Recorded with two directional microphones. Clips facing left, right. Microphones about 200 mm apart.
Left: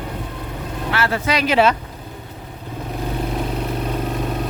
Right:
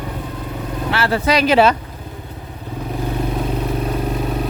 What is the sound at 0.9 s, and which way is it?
Speech, 35° right (ahead or behind).